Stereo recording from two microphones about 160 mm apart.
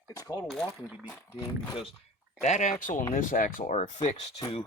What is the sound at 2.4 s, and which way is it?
Speech, 50° left (ahead or behind).